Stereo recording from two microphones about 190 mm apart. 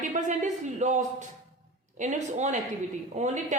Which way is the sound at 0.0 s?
40° right (ahead or behind).